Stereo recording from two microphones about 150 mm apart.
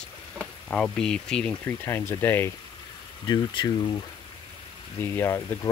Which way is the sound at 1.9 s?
15° left (ahead or behind).